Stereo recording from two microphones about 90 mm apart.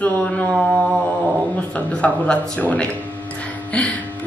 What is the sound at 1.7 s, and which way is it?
A woman's voice, 15° left (ahead or behind).